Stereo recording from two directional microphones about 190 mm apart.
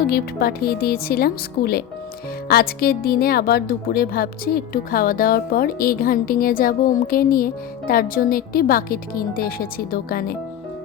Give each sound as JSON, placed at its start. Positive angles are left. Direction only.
{"t": 0.0, "sound": "a woman's voice", "side_deg": 55}